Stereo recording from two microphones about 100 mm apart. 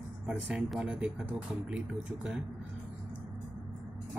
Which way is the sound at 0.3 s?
10° right (ahead or behind).